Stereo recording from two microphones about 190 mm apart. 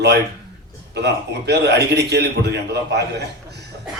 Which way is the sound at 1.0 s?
60° right (ahead or behind).